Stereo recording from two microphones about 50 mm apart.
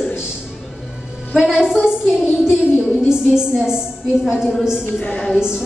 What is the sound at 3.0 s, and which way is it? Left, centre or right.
A woman's voice, centre.